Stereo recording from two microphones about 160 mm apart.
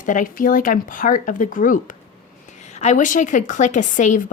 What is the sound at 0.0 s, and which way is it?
Speech, 55° left (ahead or behind).